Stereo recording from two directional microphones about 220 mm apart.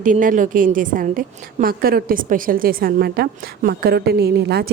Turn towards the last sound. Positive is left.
turn(degrees=-45)  # may be behind; listen again after turning